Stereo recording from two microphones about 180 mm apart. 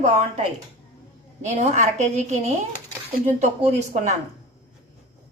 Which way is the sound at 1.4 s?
40° right (ahead or behind).